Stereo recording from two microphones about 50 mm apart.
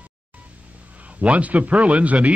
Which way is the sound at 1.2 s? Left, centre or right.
Right.